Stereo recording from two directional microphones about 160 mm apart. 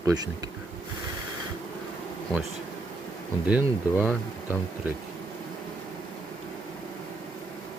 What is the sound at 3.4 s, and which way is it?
Speech, 10° right (ahead or behind).